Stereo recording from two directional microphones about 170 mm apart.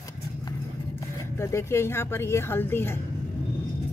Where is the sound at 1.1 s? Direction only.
15° left (ahead or behind).